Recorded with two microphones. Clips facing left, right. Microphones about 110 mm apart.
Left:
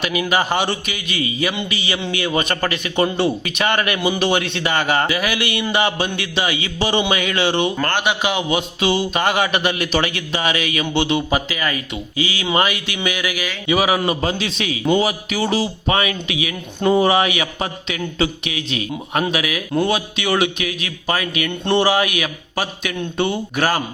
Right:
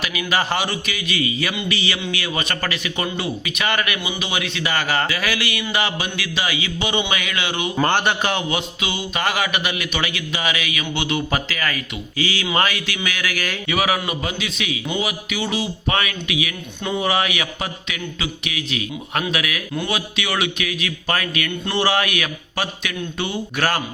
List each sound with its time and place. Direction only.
0.0 s speech: 25° left (ahead or behind)
4.0 s a man's voice: 45° left (ahead or behind)
4.3 s speech: 30° left (ahead or behind)
7.9 s a man's voice: 10° left (ahead or behind)
8.8 s speech: 30° left (ahead or behind)
14.0 s speech: 35° left (ahead or behind)
15.9 s speech: 25° left (ahead or behind)
16.8 s speech: 35° left (ahead or behind)
17.1 s speech: 25° left (ahead or behind)